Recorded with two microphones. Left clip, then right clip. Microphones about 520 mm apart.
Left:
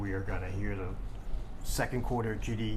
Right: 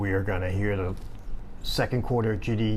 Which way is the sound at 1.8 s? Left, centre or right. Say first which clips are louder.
Right 6 dB; right.